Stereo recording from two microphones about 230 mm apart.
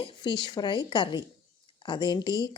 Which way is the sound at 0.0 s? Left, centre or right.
Centre.